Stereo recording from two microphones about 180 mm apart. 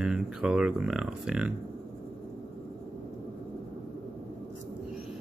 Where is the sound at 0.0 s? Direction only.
5° right (ahead or behind).